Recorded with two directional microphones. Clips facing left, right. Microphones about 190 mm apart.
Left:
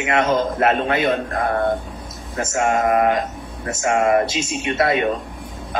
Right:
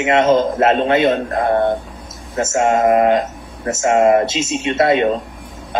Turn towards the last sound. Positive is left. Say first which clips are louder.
# right 4 dB
turn(degrees=-25)  # may be behind; listen again after turning